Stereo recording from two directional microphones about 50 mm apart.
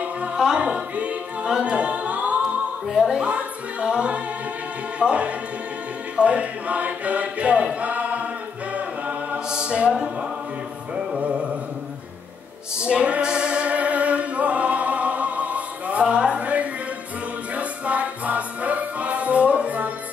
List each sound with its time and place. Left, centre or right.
0.6 s music: right
1.5 s a capella: right
2.9 s speech: centre
6.1 s choir: right
9.5 s music: centre
11.1 s mantra: right
12.7 s singing: centre
17.6 s music: right